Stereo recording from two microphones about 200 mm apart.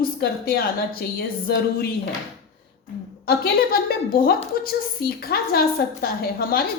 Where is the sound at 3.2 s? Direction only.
50° left (ahead or behind).